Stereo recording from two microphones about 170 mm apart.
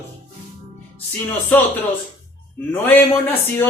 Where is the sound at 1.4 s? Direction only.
10° left (ahead or behind).